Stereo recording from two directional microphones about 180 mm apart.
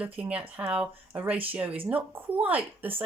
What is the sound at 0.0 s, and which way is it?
Speech, 10° right (ahead or behind).